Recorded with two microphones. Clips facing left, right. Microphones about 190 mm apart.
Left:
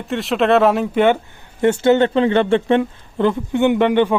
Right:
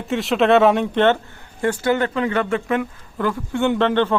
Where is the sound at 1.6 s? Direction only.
25° left (ahead or behind).